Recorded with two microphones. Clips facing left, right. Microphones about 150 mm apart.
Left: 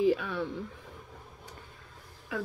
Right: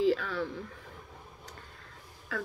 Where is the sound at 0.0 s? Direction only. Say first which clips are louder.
Left 1 dB; 15° left (ahead or behind).